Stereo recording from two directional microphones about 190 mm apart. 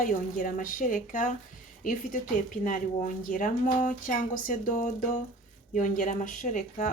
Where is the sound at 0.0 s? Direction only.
45° left (ahead or behind).